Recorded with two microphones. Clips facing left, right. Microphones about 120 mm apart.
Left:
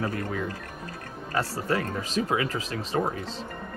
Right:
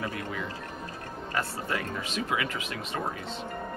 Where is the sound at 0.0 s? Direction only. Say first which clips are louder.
Left 4 dB; 45° left (ahead or behind).